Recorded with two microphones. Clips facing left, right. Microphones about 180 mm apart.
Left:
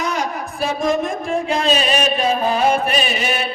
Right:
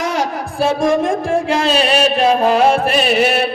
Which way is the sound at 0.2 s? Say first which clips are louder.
Right 5 dB; 90° right.